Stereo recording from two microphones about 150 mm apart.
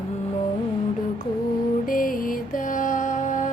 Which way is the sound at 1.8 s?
70° left (ahead or behind).